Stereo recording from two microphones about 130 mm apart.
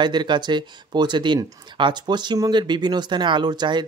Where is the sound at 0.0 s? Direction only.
35° right (ahead or behind).